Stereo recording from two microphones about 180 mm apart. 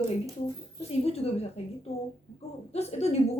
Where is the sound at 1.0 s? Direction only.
35° left (ahead or behind).